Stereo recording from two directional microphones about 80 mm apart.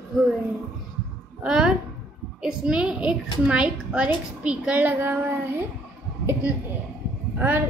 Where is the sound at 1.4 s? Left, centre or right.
Centre.